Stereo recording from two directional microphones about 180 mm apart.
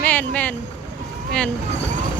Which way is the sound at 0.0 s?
10° left (ahead or behind).